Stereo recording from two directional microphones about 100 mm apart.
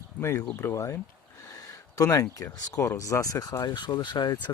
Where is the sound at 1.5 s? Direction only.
35° left (ahead or behind).